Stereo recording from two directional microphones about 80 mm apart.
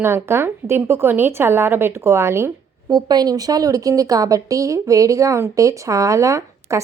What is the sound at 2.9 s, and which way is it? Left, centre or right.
A woman's voice, right.